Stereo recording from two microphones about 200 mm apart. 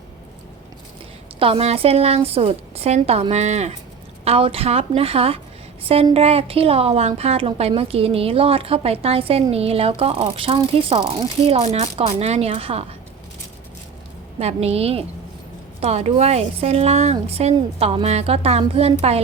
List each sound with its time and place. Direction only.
1.4 s a woman's voice: 30° right (ahead or behind)
14.3 s speech: 30° right (ahead or behind)